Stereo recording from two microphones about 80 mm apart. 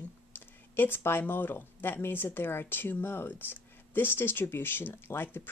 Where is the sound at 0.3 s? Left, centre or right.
Left.